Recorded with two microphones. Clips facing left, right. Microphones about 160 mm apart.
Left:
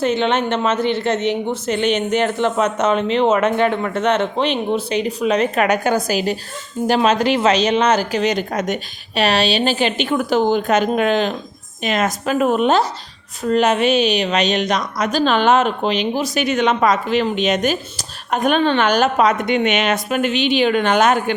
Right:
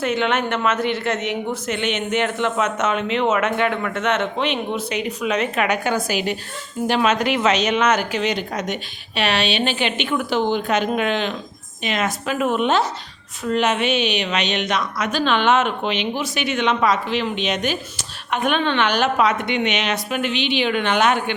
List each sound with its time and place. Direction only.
0.0 s a woman's voice: 30° left (ahead or behind)